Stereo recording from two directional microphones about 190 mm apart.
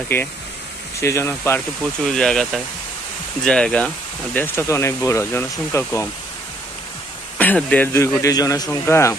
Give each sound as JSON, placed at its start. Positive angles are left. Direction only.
{"t": 0.1, "sound": "speech", "side_deg": 10}
{"t": 7.3, "sound": "speech", "side_deg": 10}